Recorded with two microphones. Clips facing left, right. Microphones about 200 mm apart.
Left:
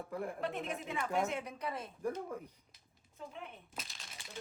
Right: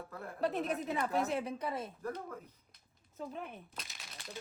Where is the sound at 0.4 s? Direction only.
35° right (ahead or behind).